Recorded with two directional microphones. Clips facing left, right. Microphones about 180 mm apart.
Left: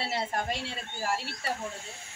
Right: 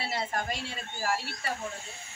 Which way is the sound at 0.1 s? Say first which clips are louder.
Even; 30° left (ahead or behind).